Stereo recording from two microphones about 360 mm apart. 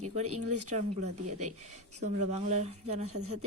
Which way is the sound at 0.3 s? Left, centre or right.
Right.